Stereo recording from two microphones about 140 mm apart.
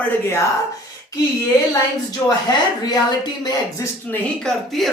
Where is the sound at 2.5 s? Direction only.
30° left (ahead or behind).